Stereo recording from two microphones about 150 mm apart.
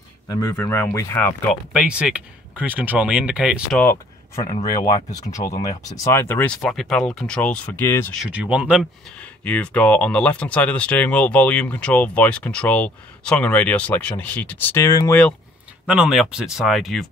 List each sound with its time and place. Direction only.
0.3 s speech: 20° left (ahead or behind)
1.5 s speech: 5° right (ahead or behind)
4.4 s speech: 25° left (ahead or behind)
8.3 s speech: 10° right (ahead or behind)
9.2 s speech: 10° left (ahead or behind)
15.9 s speech: 5° right (ahead or behind)